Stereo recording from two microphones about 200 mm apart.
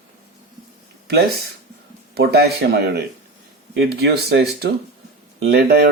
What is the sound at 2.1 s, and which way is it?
Speech, 50° right (ahead or behind).